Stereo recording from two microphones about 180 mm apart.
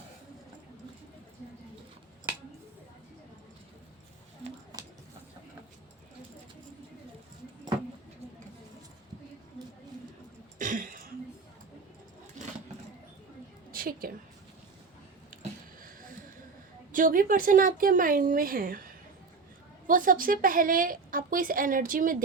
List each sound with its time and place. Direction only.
10.6 s throat clearing: 45° right (ahead or behind)
13.7 s a sound: 50° right (ahead or behind)
16.9 s a woman's voice: 50° right (ahead or behind)
19.9 s a woman's voice: 50° right (ahead or behind)